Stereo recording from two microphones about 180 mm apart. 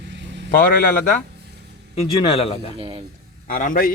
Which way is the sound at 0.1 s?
80° right.